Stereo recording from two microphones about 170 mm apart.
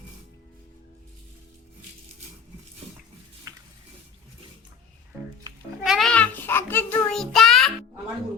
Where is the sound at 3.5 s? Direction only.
20° right (ahead or behind).